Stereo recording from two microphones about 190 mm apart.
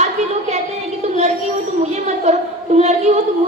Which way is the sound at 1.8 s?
40° right (ahead or behind).